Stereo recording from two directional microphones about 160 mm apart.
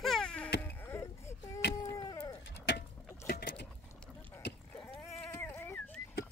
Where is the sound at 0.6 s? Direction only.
15° left (ahead or behind).